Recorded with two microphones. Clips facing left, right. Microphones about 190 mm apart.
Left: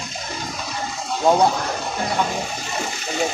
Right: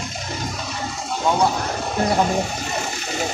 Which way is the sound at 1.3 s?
40° left (ahead or behind).